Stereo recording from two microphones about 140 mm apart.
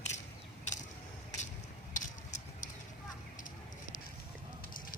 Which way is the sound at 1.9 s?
60° left (ahead or behind).